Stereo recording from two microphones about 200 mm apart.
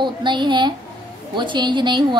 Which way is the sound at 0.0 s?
25° right (ahead or behind).